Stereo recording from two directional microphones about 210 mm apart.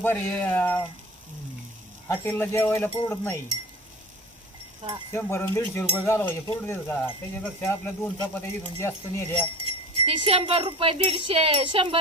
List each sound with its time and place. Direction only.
0.0 s speech: 10° left (ahead or behind)
2.0 s speech: 10° left (ahead or behind)
4.8 s cowbell: 20° right (ahead or behind)
5.1 s speech: 10° left (ahead or behind)
10.1 s wind chime: 25° right (ahead or behind)